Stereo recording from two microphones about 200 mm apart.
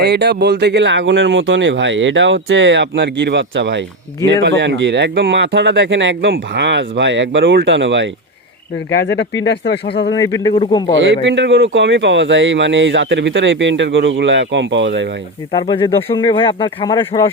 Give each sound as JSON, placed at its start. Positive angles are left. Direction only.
{"t": 0.1, "sound": "speech", "side_deg": -55}
{"t": 9.0, "sound": "speech", "side_deg": 60}
{"t": 10.1, "sound": "speech", "side_deg": 15}
{"t": 10.9, "sound": "speech", "side_deg": -65}
{"t": 15.5, "sound": "speech", "side_deg": 25}